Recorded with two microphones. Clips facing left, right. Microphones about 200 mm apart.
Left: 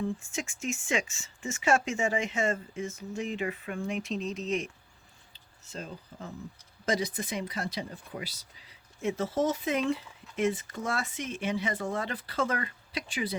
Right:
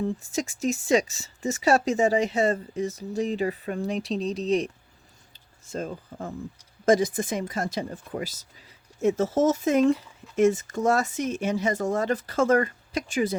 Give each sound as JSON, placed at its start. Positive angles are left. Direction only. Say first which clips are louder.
{"t": 0.0, "sound": "speech", "louder": "right 5 dB", "side_deg": -40}
{"t": 5.3, "sound": "a sound", "louder": "right 9 dB", "side_deg": -45}
{"t": 6.8, "sound": "speech", "louder": "right 9 dB", "side_deg": -50}